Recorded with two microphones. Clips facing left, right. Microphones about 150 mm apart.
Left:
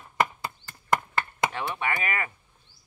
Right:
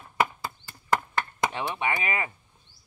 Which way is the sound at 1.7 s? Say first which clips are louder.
Right 1 dB; 20° right (ahead or behind).